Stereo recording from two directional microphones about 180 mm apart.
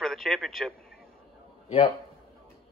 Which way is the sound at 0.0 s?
Centre (ahead or behind).